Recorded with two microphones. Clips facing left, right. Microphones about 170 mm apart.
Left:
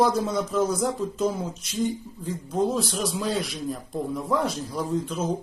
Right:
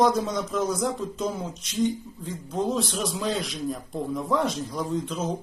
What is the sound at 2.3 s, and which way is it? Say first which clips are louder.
A man's voice: left 2 dB; 5° left (ahead or behind).